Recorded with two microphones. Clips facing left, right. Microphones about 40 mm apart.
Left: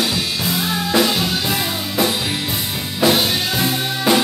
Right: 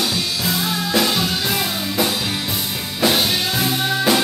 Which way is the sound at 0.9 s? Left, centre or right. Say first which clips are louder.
Left 2 dB; centre.